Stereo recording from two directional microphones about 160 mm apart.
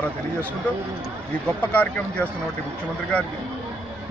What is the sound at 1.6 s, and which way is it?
Speech, 10° left (ahead or behind).